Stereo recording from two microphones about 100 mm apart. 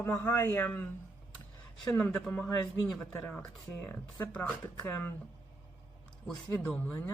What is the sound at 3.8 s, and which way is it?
Speech, 20° left (ahead or behind).